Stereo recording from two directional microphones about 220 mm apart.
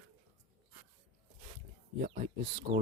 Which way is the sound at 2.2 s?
25° right (ahead or behind).